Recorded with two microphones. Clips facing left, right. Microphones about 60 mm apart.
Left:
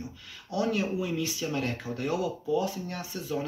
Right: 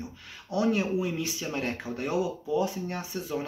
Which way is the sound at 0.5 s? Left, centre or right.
Right.